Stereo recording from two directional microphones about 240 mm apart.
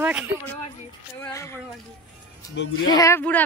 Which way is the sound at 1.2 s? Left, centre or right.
Centre.